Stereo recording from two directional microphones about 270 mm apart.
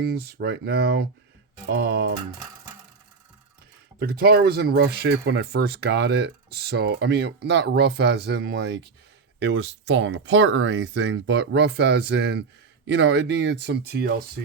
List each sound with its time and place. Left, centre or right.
0.0 s speech: right
4.0 s speech: right